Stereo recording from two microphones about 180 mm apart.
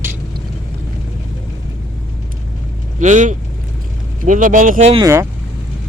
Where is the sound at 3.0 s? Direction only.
45° right (ahead or behind).